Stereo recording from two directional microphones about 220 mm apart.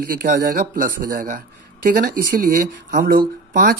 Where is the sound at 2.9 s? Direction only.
40° right (ahead or behind).